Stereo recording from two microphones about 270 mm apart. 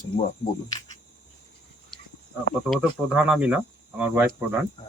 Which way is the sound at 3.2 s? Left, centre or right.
Centre.